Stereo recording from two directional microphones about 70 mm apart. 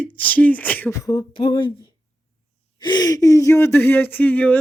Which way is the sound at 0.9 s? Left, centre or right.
Left.